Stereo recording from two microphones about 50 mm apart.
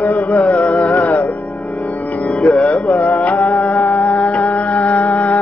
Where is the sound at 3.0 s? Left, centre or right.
Left.